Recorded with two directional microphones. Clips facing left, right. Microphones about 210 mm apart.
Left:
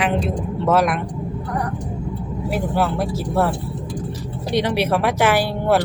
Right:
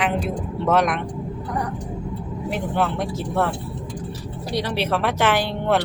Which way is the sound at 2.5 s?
5° left (ahead or behind).